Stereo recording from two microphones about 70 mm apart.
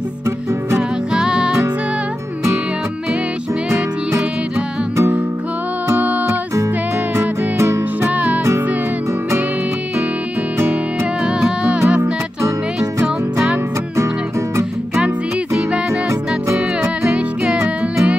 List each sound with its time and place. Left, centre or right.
1.1 s music: centre
7.2 s music: right
8.1 s music: right
11.2 s music: centre
13.0 s music: centre
16.1 s music: right
16.8 s music: centre